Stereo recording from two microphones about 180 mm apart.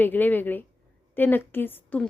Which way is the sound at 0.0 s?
10° left (ahead or behind).